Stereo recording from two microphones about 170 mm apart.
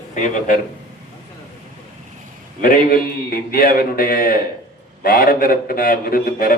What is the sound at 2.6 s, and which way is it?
A man's voice, 60° left (ahead or behind).